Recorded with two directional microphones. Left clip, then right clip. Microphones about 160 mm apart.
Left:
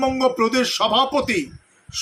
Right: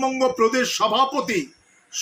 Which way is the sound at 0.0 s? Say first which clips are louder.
Left 1 dB; 25° left (ahead or behind).